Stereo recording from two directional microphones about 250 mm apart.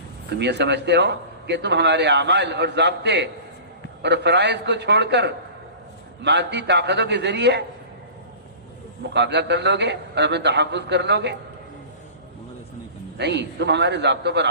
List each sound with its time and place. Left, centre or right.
0.3 s a man's voice: right
9.1 s a man's voice: right
13.1 s a man's voice: right